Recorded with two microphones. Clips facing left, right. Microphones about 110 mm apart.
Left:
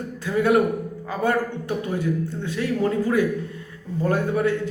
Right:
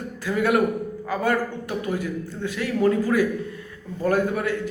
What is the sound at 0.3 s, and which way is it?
A man's voice, 25° left (ahead or behind).